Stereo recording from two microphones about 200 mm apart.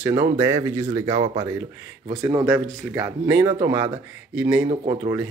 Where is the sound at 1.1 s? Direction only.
30° right (ahead or behind).